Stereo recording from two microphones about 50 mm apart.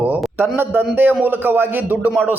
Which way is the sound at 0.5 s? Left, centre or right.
Right.